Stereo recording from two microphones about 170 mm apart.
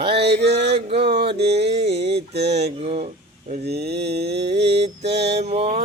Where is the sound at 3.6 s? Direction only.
70° right (ahead or behind).